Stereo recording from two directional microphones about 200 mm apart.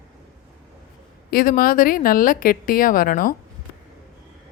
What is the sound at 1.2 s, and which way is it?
A woman's voice, 45° left (ahead or behind).